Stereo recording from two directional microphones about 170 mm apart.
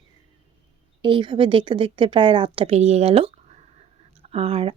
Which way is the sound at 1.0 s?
30° right (ahead or behind).